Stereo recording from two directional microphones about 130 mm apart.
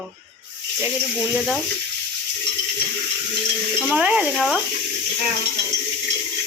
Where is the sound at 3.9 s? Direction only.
10° right (ahead or behind).